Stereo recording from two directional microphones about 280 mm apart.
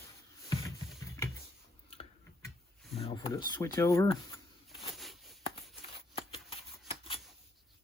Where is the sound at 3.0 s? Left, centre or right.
Centre.